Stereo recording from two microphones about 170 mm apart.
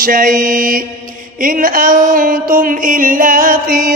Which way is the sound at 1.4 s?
55° right (ahead or behind).